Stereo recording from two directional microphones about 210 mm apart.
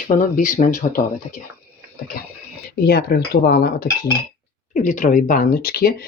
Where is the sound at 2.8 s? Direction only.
45° left (ahead or behind).